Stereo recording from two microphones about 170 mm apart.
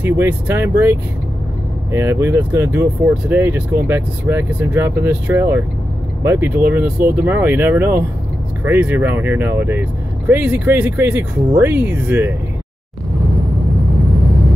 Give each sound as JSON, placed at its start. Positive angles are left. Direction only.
{"t": 0.0, "sound": "speech", "side_deg": -10}